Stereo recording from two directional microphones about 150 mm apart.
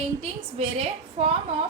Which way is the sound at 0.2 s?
40° right (ahead or behind).